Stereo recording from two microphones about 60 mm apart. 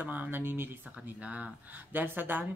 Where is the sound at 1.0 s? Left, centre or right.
Right.